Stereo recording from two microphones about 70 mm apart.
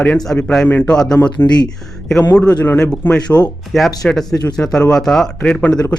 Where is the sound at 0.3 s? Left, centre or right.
Left.